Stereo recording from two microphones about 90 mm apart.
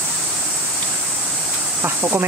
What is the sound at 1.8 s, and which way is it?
Speech, 25° right (ahead or behind).